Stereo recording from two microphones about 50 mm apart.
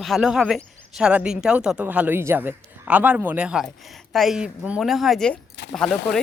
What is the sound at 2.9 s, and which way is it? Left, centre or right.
Speech, right.